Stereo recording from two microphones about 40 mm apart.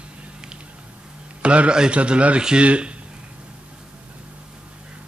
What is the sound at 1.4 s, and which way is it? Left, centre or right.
Speech, right.